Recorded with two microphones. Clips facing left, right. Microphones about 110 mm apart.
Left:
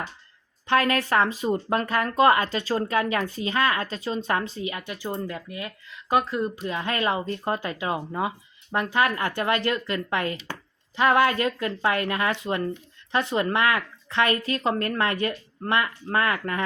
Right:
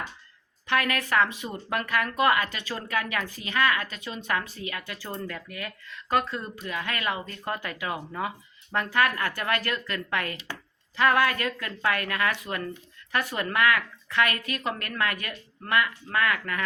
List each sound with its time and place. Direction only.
0.7 s speech: 30° left (ahead or behind)
6.6 s speech: 25° left (ahead or behind)